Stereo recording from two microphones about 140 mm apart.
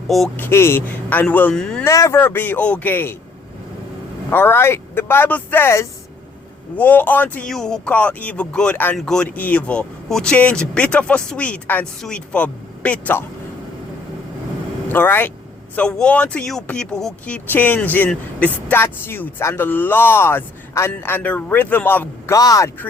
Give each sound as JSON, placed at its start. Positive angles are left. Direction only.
{"t": 0.3, "sound": "speech", "side_deg": 15}
{"t": 1.8, "sound": "speech", "side_deg": 20}
{"t": 4.3, "sound": "speech", "side_deg": 15}
{"t": 14.9, "sound": "speech", "side_deg": 15}
{"t": 22.4, "sound": "speech", "side_deg": 25}